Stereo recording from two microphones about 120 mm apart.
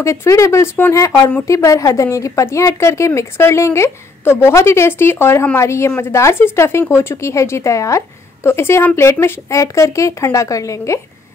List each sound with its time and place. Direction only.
0.0 s a woman's voice: 25° left (ahead or behind)